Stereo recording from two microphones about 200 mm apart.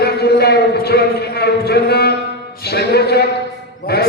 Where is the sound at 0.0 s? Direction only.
50° left (ahead or behind).